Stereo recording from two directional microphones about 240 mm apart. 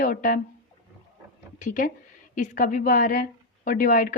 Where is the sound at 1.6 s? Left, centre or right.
Left.